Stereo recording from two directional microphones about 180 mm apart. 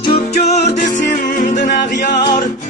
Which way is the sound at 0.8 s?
45° left (ahead or behind).